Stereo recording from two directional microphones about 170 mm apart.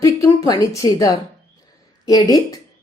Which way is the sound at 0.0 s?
20° left (ahead or behind).